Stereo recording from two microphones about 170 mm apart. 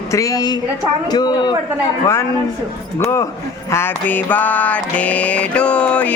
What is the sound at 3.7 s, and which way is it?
Mantra, 15° left (ahead or behind).